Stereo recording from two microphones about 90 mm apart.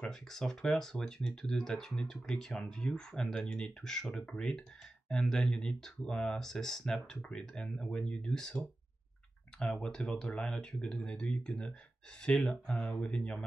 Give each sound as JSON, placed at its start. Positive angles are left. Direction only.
{"t": 0.0, "sound": "speech", "side_deg": 5}